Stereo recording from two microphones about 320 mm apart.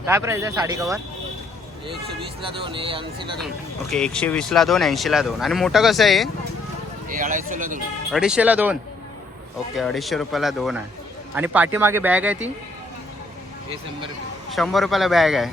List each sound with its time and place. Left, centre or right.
0.0 s a man's voice: centre
2.9 s a man's voice: centre
3.8 s speech: centre
7.1 s speech: right
8.1 s speech: centre
14.5 s speech: centre